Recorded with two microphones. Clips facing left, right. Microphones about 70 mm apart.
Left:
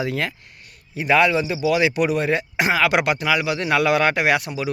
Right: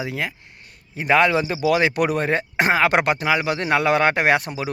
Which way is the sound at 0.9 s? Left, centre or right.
Right.